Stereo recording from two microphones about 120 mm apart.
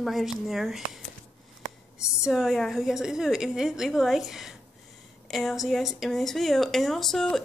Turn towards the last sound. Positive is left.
turn(degrees=5)  # may be behind; listen again after turning